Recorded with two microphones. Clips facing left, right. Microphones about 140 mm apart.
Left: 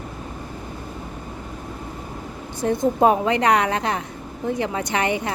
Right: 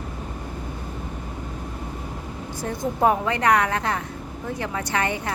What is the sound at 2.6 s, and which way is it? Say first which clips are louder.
Speech: left 5 dB; 20° left (ahead or behind).